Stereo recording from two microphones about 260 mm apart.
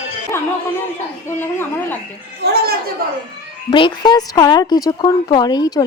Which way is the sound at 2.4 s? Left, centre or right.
Right.